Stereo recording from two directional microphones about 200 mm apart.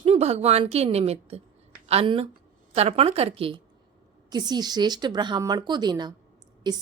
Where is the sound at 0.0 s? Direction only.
30° right (ahead or behind).